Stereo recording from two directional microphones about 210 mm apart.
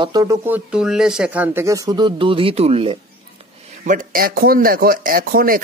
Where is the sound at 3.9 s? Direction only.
45° right (ahead or behind).